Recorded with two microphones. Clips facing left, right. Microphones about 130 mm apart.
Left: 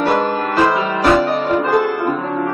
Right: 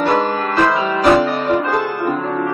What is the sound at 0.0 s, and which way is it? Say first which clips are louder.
Music: even; 5° left (ahead or behind).